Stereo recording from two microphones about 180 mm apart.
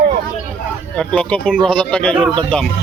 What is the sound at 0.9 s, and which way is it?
Speech, 5° left (ahead or behind).